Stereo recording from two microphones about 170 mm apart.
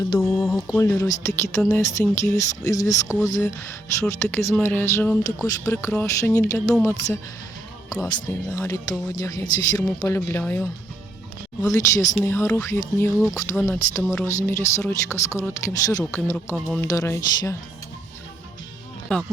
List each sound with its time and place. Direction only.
0.3 s speech: centre (ahead or behind)
0.8 s speech: 15° left (ahead or behind)
7.9 s speech: 15° left (ahead or behind)
16.6 s speech: centre (ahead or behind)
16.8 s speech: 15° left (ahead or behind)
19.1 s speech: 5° left (ahead or behind)